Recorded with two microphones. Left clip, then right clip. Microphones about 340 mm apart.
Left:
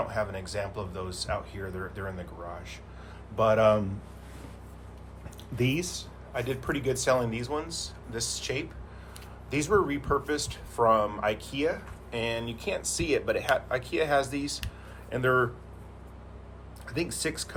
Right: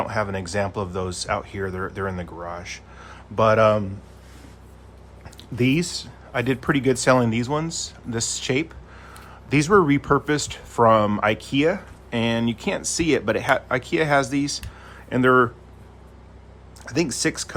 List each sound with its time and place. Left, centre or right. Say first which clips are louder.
0.0 s speech: right 6 dB; right
5.5 s speech: right 7 dB; right
16.8 s speech: right 8 dB; centre